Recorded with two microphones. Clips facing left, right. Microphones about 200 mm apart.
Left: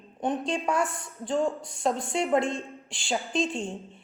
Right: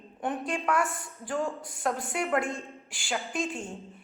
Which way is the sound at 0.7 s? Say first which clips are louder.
Right 1 dB; centre (ahead or behind).